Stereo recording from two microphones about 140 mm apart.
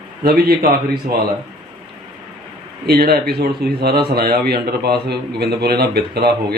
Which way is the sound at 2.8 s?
90° right.